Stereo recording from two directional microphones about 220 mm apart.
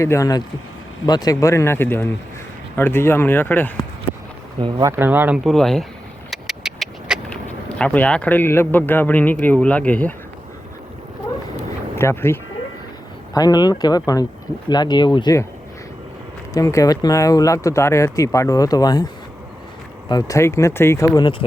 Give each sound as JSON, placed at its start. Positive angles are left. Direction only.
{"t": 0.0, "sound": "speech", "side_deg": 15}
{"t": 4.6, "sound": "speech", "side_deg": -15}
{"t": 11.9, "sound": "speech", "side_deg": 10}
{"t": 16.6, "sound": "speech", "side_deg": 15}
{"t": 20.1, "sound": "speech", "side_deg": 15}